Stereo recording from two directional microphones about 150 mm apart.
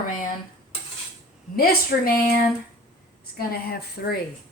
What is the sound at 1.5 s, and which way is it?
Speech, 85° left.